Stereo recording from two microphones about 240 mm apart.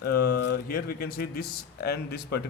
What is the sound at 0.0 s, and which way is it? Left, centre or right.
Speech, left.